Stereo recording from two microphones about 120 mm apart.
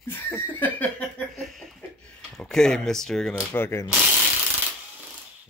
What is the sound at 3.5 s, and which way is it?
Speech, 20° left (ahead or behind).